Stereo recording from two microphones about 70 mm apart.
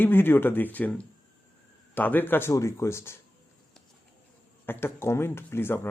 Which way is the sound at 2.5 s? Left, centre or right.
Left.